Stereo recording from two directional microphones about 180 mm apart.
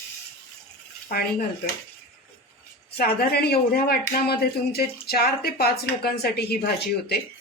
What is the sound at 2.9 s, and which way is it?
Speech, 60° left (ahead or behind).